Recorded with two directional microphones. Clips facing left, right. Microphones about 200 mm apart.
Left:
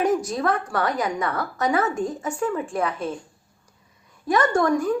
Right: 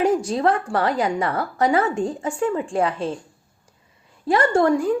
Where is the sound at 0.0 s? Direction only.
30° right (ahead or behind).